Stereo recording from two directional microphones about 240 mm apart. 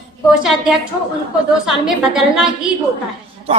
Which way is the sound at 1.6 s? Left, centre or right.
Centre.